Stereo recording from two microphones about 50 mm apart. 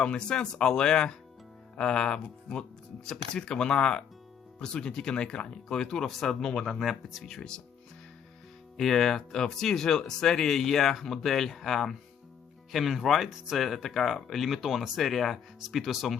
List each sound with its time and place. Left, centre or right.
0.0 s speech: centre
6.7 s speech: centre
8.8 s speech: centre